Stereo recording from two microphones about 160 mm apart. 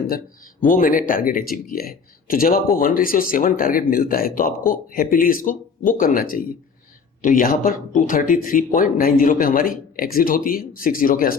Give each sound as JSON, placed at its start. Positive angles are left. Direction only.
{"t": 0.7, "sound": "speech", "side_deg": 60}